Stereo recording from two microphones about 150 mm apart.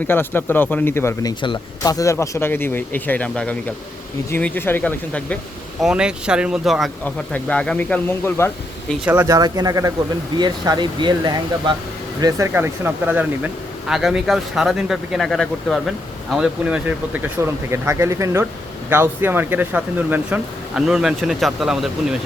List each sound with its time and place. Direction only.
0.1 s speech: 15° left (ahead or behind)
5.8 s speech: 5° right (ahead or behind)
7.0 s speech: 10° left (ahead or behind)
9.0 s speech: 20° right (ahead or behind)
12.2 s speech: 20° right (ahead or behind)
17.4 s speech: 20° right (ahead or behind); by 21.8 s centre (ahead or behind)